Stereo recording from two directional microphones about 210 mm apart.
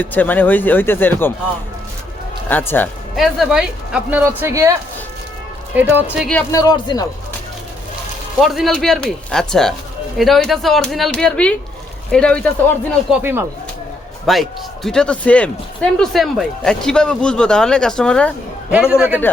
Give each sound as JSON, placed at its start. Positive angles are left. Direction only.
{"t": 0.0, "sound": "speech", "side_deg": 10}
{"t": 2.5, "sound": "speech", "side_deg": 10}
{"t": 6.5, "sound": "speech", "side_deg": 20}
{"t": 8.4, "sound": "speech", "side_deg": 0}
{"t": 14.3, "sound": "speech", "side_deg": 0}